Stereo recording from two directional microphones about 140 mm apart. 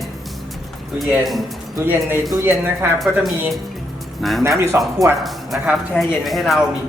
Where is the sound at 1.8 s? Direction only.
15° right (ahead or behind).